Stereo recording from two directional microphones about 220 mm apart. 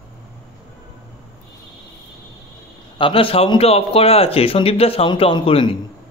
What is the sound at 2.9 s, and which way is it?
Speech, 25° left (ahead or behind).